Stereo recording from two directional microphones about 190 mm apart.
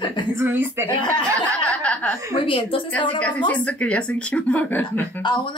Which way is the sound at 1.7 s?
5° left (ahead or behind).